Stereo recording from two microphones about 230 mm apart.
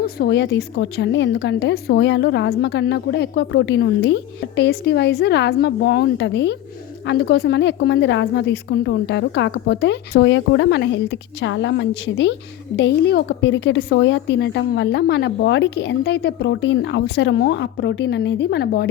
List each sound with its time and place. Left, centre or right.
0.0 s a woman's voice: left